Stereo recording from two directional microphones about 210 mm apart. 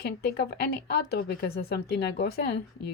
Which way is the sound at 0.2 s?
50° left (ahead or behind).